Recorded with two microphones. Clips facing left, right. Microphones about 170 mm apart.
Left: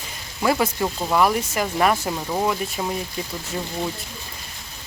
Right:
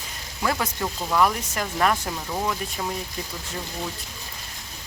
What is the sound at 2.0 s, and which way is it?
Speech, 25° left (ahead or behind).